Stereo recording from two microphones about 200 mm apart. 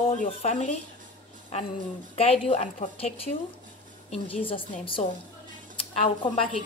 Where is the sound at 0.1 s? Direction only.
35° left (ahead or behind).